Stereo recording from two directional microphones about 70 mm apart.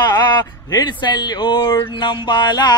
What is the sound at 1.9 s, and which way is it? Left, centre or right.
Mantra, left.